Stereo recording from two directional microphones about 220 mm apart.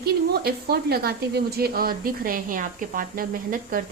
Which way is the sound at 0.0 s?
45° right (ahead or behind).